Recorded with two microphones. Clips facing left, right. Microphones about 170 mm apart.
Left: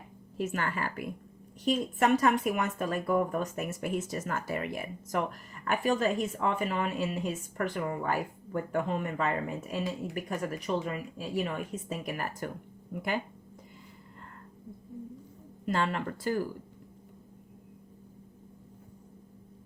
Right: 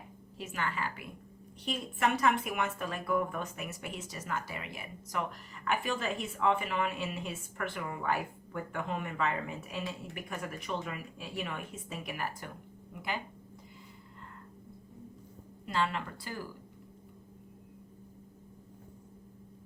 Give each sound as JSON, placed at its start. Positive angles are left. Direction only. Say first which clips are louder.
{"t": 0.3, "sound": "speech", "louder": "left 5 dB", "side_deg": 50}
{"t": 15.6, "sound": "speech", "louder": "left 3 dB", "side_deg": 45}